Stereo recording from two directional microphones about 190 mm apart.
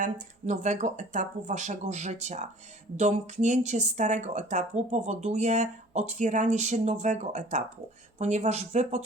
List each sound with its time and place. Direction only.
0.0 s speech: 40° right (ahead or behind)